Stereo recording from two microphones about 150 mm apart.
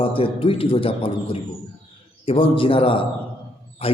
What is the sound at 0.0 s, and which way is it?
A man's voice, 35° left (ahead or behind).